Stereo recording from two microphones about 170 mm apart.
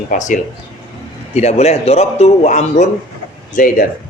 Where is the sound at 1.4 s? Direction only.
40° left (ahead or behind).